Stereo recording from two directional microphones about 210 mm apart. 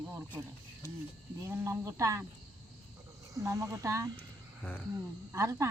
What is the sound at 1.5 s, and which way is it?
Speech, 10° right (ahead or behind).